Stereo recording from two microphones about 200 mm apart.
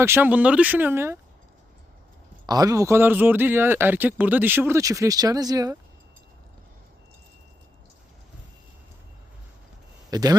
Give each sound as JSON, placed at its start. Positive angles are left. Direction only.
{"t": 0.0, "sound": "speech", "side_deg": -10}
{"t": 2.5, "sound": "speech", "side_deg": -20}
{"t": 10.1, "sound": "speech", "side_deg": -20}